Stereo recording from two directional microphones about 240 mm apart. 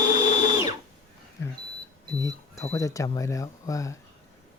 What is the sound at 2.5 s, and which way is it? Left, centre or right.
Speech, centre.